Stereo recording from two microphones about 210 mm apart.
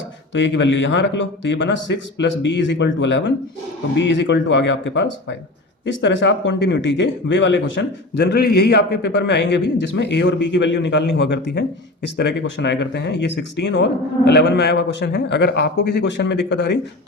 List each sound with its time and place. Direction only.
0.3 s speech: 60° left (ahead or behind)